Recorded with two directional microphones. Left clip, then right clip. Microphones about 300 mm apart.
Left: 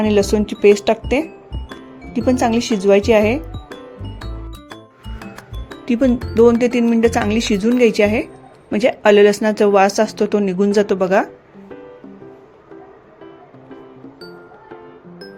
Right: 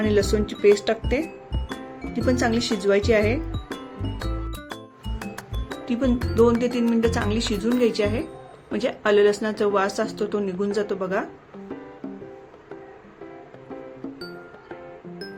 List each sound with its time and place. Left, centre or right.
0.0 s speech: centre
1.5 s music: centre
2.1 s speech: centre
3.5 s music: centre
5.8 s speech: left